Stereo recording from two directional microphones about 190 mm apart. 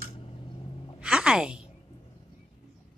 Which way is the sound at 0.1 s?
30° left (ahead or behind).